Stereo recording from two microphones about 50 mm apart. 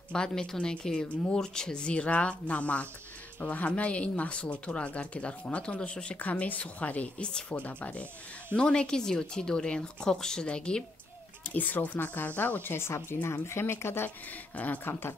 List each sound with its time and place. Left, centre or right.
0.1 s speech: centre
6.1 s speech: left
8.5 s speech: centre
11.4 s speech: left
12.7 s speech: left